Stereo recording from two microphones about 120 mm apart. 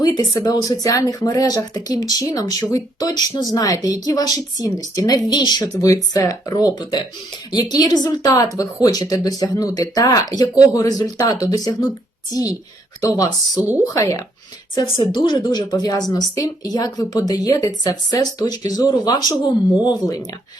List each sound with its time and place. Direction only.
0.0 s speech: 30° left (ahead or behind)
13.6 s speech: 15° right (ahead or behind)
13.8 s speech: 25° left (ahead or behind)
14.8 s speech: 40° left (ahead or behind)